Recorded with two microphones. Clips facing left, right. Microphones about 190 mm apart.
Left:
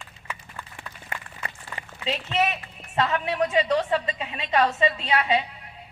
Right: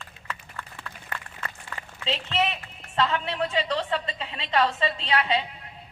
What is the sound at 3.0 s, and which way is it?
A woman's voice, 20° left (ahead or behind).